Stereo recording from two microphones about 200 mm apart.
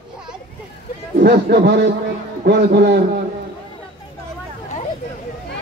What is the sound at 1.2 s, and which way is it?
A man's voice, 55° right (ahead or behind).